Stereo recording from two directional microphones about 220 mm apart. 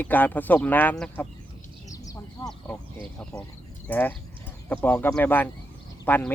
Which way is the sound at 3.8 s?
10° left (ahead or behind).